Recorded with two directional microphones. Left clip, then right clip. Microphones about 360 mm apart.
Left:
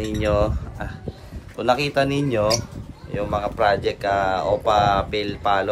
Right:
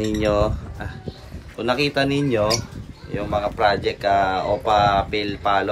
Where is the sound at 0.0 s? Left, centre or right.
Centre.